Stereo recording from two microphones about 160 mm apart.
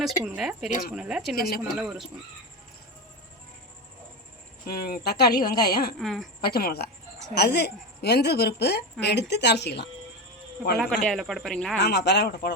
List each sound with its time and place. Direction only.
0.0 s speech: 5° right (ahead or behind)
1.4 s speech: 70° left (ahead or behind)
1.7 s speech: centre (ahead or behind)
4.6 s speech: 75° left (ahead or behind)
6.0 s speech: centre (ahead or behind)
6.4 s a woman's voice: 70° left (ahead or behind); by 9.8 s 90° left
10.8 s speech: 5° left (ahead or behind)
11.8 s a woman's voice: 90° left